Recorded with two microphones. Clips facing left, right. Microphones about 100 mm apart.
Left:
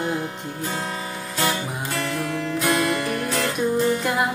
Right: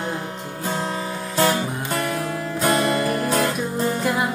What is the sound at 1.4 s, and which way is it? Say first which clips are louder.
Music: right 5 dB; 40° right (ahead or behind).